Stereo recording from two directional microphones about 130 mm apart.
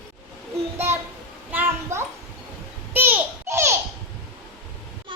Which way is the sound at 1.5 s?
20° right (ahead or behind).